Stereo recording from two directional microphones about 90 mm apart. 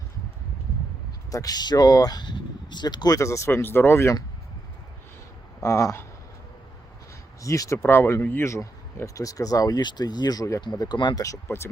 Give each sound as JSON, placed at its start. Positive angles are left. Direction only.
{"t": 1.3, "sound": "speech", "side_deg": 45}
{"t": 3.2, "sound": "speech", "side_deg": 35}
{"t": 5.6, "sound": "speech", "side_deg": 30}
{"t": 7.4, "sound": "speech", "side_deg": 40}
{"t": 8.4, "sound": "speech", "side_deg": 35}
{"t": 10.6, "sound": "speech", "side_deg": 55}
{"t": 11.2, "sound": "speech", "side_deg": 35}